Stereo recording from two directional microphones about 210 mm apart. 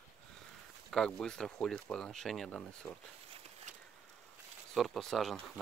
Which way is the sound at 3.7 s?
35° right (ahead or behind).